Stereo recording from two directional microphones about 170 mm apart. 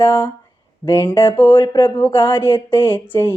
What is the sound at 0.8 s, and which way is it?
Speech, 25° left (ahead or behind).